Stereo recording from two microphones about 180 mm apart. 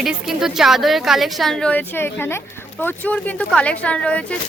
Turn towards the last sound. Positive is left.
turn(degrees=5)  # may be behind; listen again after turning